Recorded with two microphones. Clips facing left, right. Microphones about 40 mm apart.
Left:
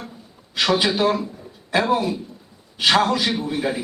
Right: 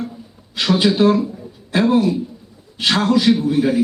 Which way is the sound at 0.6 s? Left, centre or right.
Centre.